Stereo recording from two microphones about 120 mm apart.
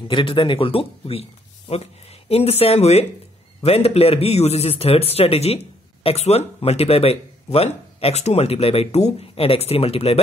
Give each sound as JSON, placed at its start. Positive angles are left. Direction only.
{"t": 0.1, "sound": "a man's voice", "side_deg": 45}